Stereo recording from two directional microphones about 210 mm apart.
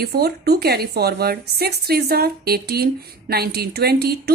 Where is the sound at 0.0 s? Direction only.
50° right (ahead or behind).